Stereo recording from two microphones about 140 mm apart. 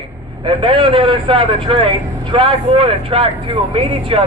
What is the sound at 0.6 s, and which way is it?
A man's voice, 35° right (ahead or behind).